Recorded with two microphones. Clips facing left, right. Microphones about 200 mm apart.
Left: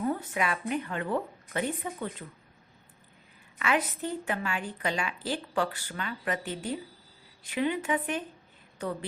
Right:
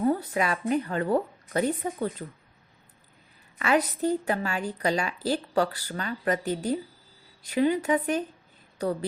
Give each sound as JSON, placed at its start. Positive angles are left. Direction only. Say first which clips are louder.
{"t": 0.0, "sound": "a woman's voice", "louder": "right 5 dB", "side_deg": -40}
{"t": 3.6, "sound": "a woman's voice", "louder": "right 5 dB", "side_deg": -40}